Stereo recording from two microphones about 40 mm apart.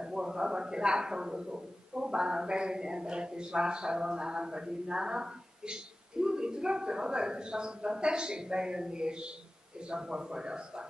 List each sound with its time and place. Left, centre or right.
0.0 s speech: centre